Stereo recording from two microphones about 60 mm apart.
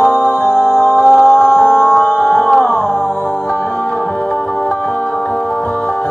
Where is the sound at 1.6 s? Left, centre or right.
Centre.